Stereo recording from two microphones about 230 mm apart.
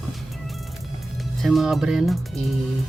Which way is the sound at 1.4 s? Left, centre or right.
Centre.